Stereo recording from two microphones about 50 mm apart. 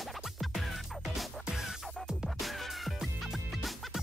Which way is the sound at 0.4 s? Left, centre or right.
Centre.